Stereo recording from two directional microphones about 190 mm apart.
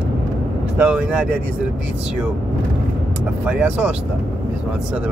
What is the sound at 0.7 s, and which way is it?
Speech, 5° right (ahead or behind).